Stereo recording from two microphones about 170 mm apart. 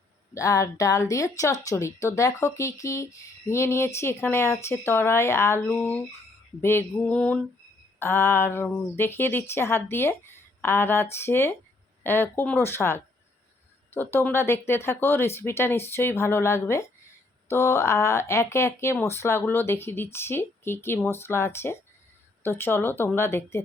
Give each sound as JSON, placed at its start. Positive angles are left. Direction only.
{"t": 0.3, "sound": "a woman's voice", "side_deg": 20}